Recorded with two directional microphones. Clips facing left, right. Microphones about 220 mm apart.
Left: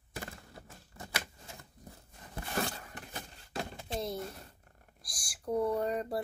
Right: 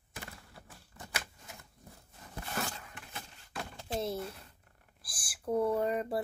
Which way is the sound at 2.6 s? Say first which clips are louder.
Left 4 dB; 40° left (ahead or behind).